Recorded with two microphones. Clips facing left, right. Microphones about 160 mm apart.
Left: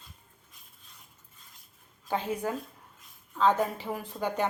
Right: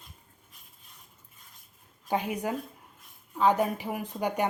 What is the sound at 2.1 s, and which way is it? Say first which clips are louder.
Speech: right 1 dB; 15° right (ahead or behind).